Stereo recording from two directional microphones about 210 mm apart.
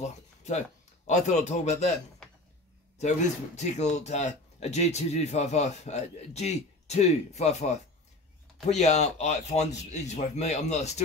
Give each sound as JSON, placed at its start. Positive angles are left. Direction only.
{"t": 0.0, "sound": "a sound", "side_deg": 35}
{"t": 1.0, "sound": "speech", "side_deg": 35}
{"t": 3.0, "sound": "speech", "side_deg": 35}